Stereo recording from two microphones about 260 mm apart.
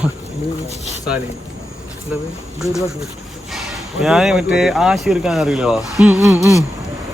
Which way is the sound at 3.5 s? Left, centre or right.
Centre.